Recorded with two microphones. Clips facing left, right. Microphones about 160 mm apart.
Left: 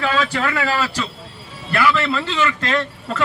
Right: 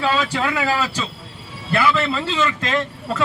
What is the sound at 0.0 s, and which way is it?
A man's voice, 15° right (ahead or behind).